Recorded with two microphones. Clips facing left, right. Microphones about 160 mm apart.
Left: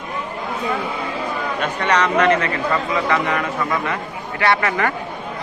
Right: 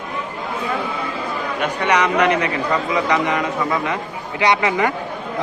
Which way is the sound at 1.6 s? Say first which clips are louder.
Right 1 dB; 10° right (ahead or behind).